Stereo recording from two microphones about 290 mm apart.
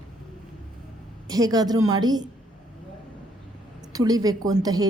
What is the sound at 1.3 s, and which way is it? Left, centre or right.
Speech, centre.